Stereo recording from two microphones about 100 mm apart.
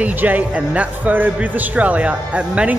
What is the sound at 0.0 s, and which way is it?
A man's voice, 15° right (ahead or behind).